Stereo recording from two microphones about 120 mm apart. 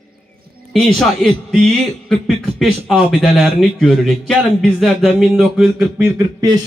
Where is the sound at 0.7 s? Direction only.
5° left (ahead or behind).